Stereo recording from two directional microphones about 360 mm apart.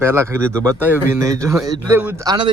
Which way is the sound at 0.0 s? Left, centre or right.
Centre.